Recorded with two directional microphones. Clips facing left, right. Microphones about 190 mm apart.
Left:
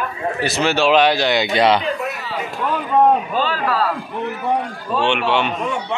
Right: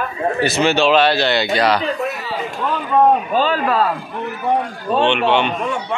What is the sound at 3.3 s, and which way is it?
Mantra, 20° right (ahead or behind).